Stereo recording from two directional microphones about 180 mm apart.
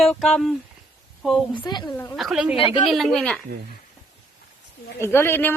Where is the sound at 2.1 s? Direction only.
Centre (ahead or behind).